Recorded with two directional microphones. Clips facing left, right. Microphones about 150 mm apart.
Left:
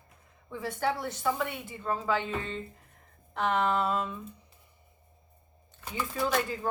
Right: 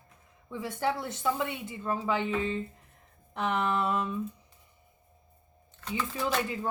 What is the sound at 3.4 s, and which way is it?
Speech, 20° right (ahead or behind).